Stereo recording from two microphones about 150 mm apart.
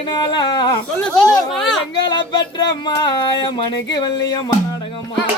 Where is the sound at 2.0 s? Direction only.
30° left (ahead or behind).